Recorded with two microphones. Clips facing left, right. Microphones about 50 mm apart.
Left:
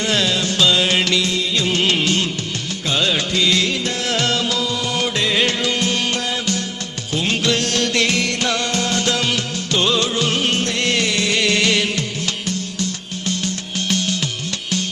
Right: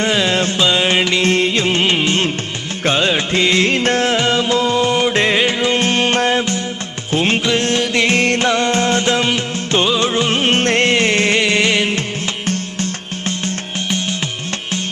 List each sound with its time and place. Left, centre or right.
0.3 s music: right
0.5 s music: right
1.1 s music: right
1.6 s music: right
4.1 s music: right
5.4 s music: centre
5.6 s music: right
8.1 s music: right